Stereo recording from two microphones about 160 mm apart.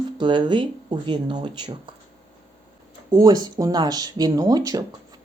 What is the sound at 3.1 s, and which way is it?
A woman's voice, 25° right (ahead or behind).